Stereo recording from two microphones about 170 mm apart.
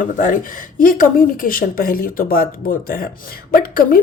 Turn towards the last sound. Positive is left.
turn(degrees=55)  # may be behind; listen again after turning